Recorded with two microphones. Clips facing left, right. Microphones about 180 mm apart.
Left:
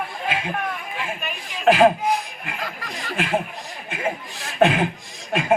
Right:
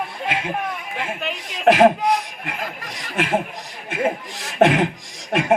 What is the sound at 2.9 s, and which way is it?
Speech, 75° right (ahead or behind).